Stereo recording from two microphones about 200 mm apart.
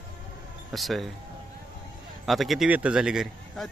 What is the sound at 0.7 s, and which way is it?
Speech, centre (ahead or behind).